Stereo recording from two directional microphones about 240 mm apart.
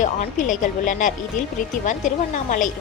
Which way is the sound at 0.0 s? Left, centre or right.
Left.